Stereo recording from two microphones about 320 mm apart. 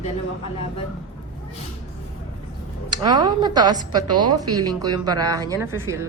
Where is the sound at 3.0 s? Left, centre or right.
Centre.